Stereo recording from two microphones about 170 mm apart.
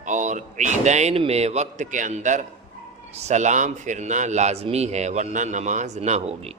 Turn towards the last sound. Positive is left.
turn(degrees=-40)  # may be behind; listen again after turning